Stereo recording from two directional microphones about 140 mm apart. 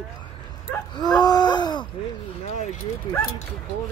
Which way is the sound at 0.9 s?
30° left (ahead or behind).